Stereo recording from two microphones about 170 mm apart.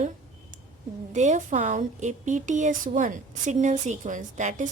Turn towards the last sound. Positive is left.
turn(degrees=-45)  # may be behind; listen again after turning